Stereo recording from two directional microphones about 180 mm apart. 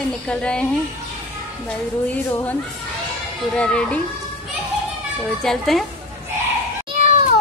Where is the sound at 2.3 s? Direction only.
15° left (ahead or behind).